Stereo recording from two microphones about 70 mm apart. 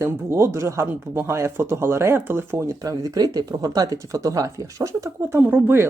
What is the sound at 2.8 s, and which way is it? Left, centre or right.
Speech, right.